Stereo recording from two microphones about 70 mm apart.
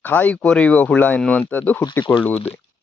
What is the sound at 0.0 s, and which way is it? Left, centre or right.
Speech, left.